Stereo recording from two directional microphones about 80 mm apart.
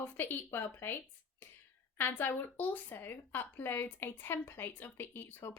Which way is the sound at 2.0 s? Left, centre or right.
Left.